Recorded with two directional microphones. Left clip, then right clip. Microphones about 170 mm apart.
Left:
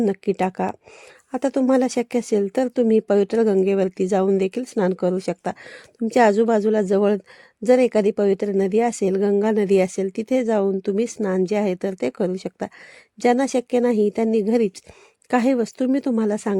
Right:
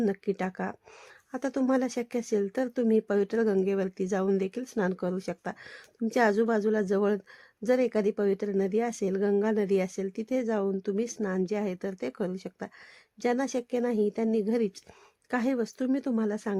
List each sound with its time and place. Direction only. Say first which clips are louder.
0.0 s speech: left 9 dB; 40° left (ahead or behind)